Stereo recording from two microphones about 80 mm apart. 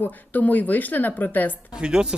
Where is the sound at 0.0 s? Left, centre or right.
Left.